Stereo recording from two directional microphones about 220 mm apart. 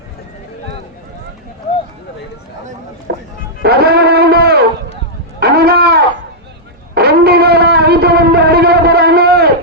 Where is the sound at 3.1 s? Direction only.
50° right (ahead or behind).